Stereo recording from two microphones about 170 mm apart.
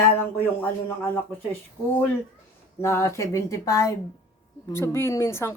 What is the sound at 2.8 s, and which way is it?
Speech, 15° left (ahead or behind).